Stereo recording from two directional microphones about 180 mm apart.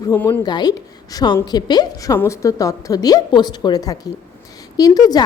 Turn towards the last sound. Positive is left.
turn(degrees=20)  # may be behind; listen again after turning